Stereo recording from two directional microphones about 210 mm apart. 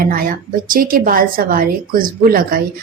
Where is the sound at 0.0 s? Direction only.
45° right (ahead or behind).